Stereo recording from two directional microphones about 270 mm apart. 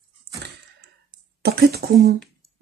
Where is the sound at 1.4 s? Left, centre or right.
Right.